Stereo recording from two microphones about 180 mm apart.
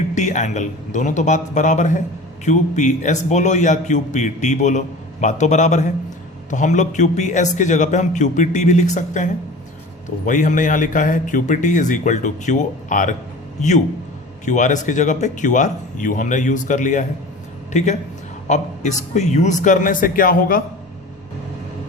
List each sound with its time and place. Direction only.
0.1 s a man's voice: 40° left (ahead or behind)